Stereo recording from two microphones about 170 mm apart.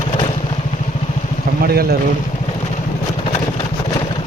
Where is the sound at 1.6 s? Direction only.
65° right (ahead or behind).